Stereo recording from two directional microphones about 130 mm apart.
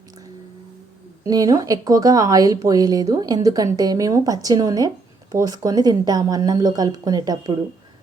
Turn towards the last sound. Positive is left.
turn(degrees=-30)  # may be behind; listen again after turning